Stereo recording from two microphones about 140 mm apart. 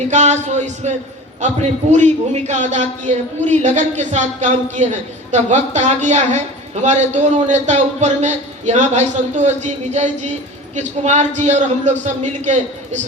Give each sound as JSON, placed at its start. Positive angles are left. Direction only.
{"t": 0.1, "sound": "a man's voice", "side_deg": -55}